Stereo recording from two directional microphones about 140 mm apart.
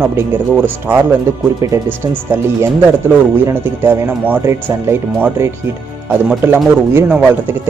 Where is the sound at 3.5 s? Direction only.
15° right (ahead or behind).